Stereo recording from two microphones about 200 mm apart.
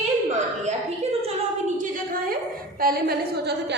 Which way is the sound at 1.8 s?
45° right (ahead or behind).